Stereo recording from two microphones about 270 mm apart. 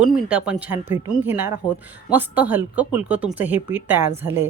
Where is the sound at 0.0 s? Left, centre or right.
Centre.